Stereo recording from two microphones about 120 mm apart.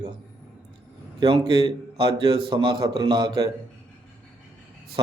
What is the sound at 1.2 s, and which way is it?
Speech, 40° right (ahead or behind).